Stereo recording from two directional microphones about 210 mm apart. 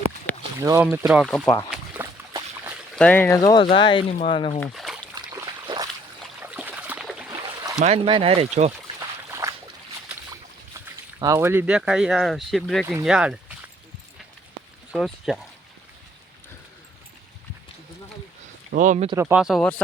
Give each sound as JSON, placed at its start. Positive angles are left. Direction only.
{"t": 0.6, "sound": "speech", "side_deg": -15}
{"t": 1.7, "sound": "a sound", "side_deg": -10}
{"t": 2.9, "sound": "speech", "side_deg": 5}
{"t": 4.6, "sound": "splash", "side_deg": 0}
{"t": 5.3, "sound": "splash", "side_deg": -20}
{"t": 6.4, "sound": "a sound", "side_deg": -5}
{"t": 7.3, "sound": "a sound", "side_deg": -20}
{"t": 7.8, "sound": "speech", "side_deg": -30}
{"t": 9.3, "sound": "a sound", "side_deg": -15}
{"t": 10.8, "sound": "speech", "side_deg": -15}
{"t": 12.8, "sound": "speech", "side_deg": -10}
{"t": 14.9, "sound": "speech", "side_deg": 0}
{"t": 18.7, "sound": "speech", "side_deg": -35}
{"t": 19.1, "sound": "speech", "side_deg": -10}